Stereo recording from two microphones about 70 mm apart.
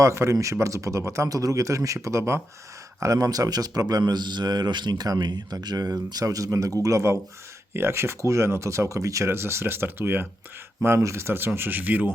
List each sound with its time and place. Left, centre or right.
0.0 s a man's voice: right
3.0 s a man's voice: right
7.7 s speech: right